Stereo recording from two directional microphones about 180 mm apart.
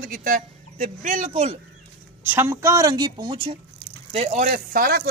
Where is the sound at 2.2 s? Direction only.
10° right (ahead or behind); by 3.6 s 25° right (ahead or behind).